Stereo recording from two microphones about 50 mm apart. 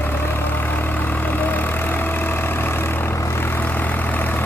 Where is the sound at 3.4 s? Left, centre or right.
Left.